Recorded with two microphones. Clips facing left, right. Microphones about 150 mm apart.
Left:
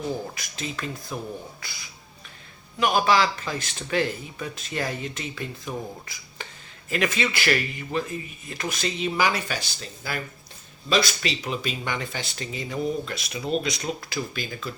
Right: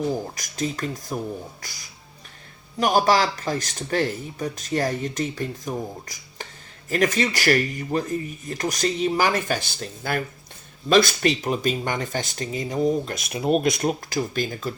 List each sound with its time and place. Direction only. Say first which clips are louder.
0.3 s speech: right 6 dB; 40° right (ahead or behind)
2.7 s speech: right 2 dB; 40° right (ahead or behind)